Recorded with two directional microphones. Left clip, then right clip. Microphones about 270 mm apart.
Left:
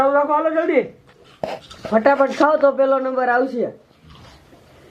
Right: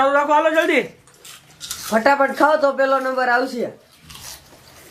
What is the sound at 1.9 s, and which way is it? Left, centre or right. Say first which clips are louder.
Speech: left 1 dB; centre.